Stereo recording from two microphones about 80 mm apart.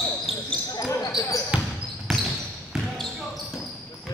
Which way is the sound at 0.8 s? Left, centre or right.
Left.